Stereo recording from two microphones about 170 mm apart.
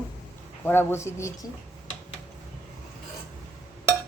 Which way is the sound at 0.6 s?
15° left (ahead or behind).